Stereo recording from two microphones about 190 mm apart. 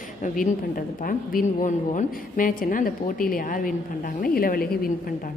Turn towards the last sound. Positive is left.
turn(degrees=50)  # may be behind; listen again after turning